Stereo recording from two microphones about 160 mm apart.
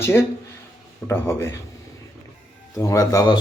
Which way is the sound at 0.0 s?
15° left (ahead or behind).